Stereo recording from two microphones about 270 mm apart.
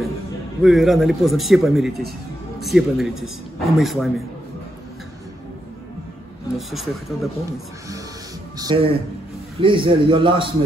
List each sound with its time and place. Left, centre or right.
0.6 s a man's voice: centre
6.5 s a man's voice: centre
8.5 s a man's voice: centre